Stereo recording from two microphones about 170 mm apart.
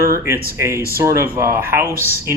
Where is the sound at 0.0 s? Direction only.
15° right (ahead or behind).